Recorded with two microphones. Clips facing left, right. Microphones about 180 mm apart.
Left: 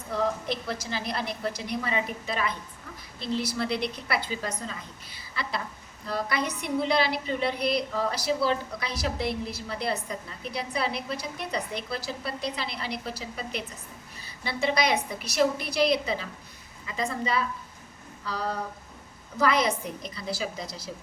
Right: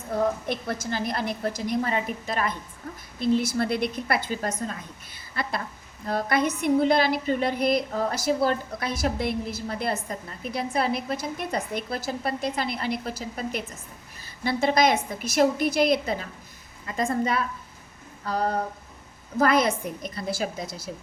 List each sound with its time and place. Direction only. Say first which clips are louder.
0.1 s a woman's voice: right 3 dB; 55° right (ahead or behind)